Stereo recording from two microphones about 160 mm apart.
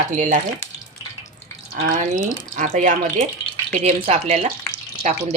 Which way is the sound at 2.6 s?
50° right (ahead or behind).